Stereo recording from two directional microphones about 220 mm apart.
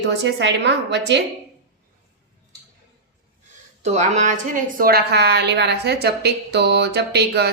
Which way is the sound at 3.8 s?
30° right (ahead or behind).